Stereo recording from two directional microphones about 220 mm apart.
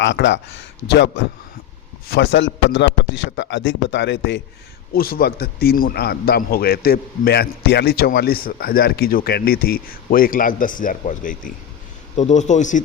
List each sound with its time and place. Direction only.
0.0 s a man's voice: 55° left (ahead or behind)
4.9 s a man's voice: 40° left (ahead or behind)